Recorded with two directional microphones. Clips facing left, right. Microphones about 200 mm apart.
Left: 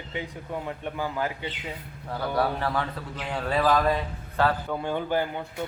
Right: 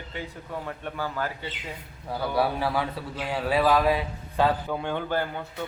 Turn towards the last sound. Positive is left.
turn(degrees=15)  # may be behind; listen again after turning